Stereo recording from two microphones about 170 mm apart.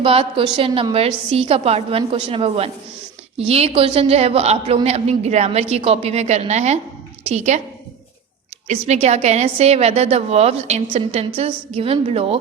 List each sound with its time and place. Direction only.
0.0 s a woman's voice: 30° right (ahead or behind)
8.6 s a woman's voice: 40° right (ahead or behind)